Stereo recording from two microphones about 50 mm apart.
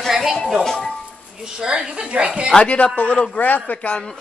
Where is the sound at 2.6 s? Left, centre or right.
Left.